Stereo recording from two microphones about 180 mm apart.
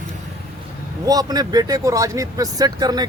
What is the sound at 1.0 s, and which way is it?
Speech, 20° right (ahead or behind).